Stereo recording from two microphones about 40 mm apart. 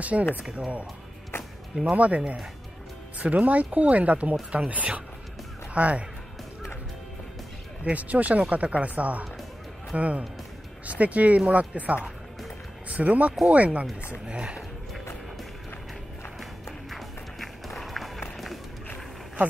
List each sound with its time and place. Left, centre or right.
0.0 s speech: right
0.4 s speech: right
1.9 s speech: right
7.9 s speech: right
14.2 s speech: right
16.9 s music: centre